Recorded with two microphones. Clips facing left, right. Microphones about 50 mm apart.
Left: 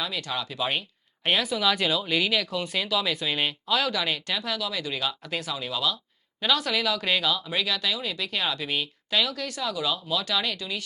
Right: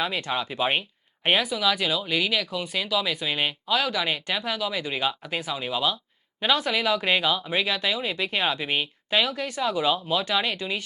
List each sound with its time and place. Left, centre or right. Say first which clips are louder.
0.0 s speech: right 4 dB; right
1.5 s speech: even; centre; by 10.8 s right